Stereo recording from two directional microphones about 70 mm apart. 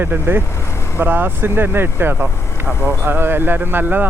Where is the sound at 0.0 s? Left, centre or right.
Right.